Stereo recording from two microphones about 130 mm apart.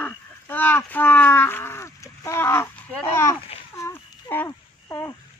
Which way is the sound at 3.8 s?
20° left (ahead or behind).